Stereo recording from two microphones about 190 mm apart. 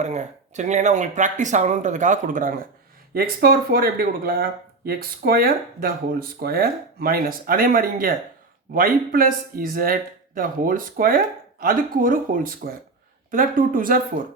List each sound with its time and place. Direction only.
0.0 s speech: 35° right (ahead or behind)